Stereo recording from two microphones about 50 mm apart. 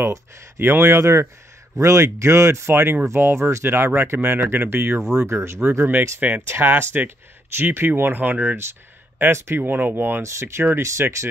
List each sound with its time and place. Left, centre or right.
0.0 s speech: right
2.7 s speech: right
3.1 s speech: right
3.6 s speech: right
5.2 s speech: right
5.7 s speech: right
9.6 s speech: right
10.2 s speech: right
10.8 s speech: right